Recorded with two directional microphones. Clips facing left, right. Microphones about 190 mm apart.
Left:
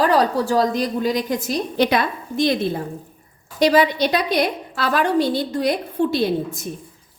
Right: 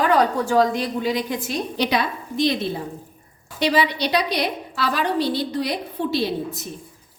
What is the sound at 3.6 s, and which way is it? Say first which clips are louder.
A woman's voice: left 5 dB; 45° left (ahead or behind).